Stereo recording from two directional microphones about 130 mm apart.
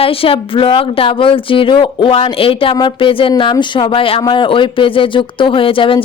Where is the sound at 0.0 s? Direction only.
45° left (ahead or behind).